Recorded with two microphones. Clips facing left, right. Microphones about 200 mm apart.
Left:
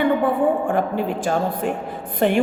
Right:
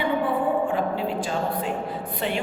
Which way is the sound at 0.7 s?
50° left (ahead or behind).